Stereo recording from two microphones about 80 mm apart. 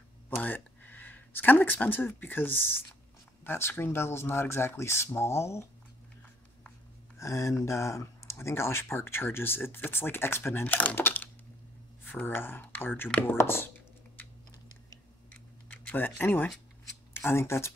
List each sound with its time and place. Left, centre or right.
0.4 s speech: left
7.2 s speech: left
15.7 s speech: centre; by 17.7 s left